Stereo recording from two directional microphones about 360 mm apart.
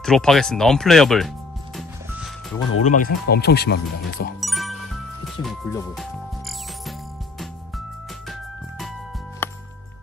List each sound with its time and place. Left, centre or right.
0.0 s speech: centre
1.8 s music: centre
2.8 s speech: left
4.4 s music: centre
5.2 s speech: centre
8.3 s music: centre